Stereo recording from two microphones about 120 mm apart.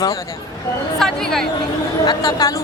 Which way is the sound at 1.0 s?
5° left (ahead or behind).